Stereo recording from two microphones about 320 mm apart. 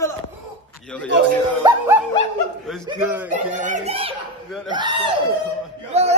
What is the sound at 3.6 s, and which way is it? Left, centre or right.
Speech, right.